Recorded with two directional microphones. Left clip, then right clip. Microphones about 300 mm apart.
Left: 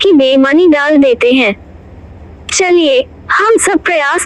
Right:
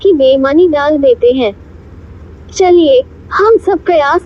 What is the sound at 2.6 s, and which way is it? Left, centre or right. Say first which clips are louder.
Speech: right 2 dB; left.